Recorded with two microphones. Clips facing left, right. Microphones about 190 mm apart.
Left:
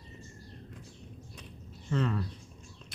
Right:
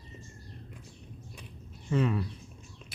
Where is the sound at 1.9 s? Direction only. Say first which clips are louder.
Right 3 dB; 10° right (ahead or behind).